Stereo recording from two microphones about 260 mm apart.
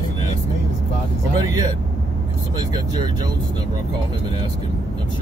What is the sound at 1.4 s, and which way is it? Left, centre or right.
Speech, centre.